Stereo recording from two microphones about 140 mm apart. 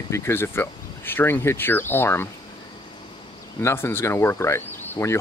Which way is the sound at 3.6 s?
15° left (ahead or behind).